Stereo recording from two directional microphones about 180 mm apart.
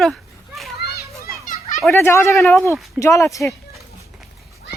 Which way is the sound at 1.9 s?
15° left (ahead or behind).